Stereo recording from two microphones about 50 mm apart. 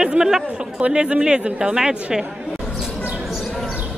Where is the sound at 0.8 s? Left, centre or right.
Right.